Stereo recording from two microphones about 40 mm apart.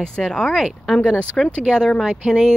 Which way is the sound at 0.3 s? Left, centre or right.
Left.